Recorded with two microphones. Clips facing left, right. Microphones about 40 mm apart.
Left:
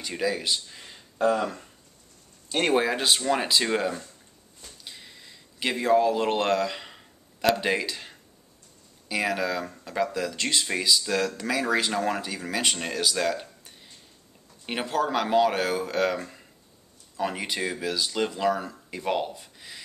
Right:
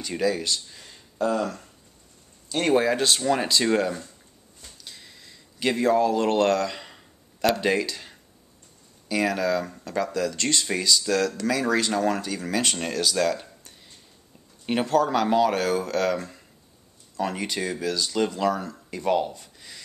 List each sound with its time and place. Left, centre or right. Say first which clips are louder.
0.0 s speech: right 3 dB; centre
0.7 s speech: right 1 dB; left
2.8 s speech: right 2 dB; centre
4.8 s a sound: left 1 dB; centre
9.1 s speech: right 3 dB; centre